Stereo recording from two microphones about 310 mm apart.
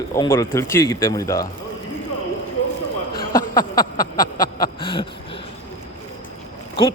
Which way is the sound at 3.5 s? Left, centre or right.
Centre.